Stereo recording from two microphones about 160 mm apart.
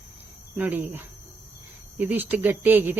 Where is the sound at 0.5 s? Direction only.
10° right (ahead or behind).